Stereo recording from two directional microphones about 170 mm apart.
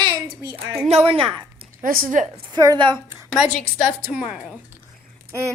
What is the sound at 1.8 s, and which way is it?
Speech, 55° right (ahead or behind).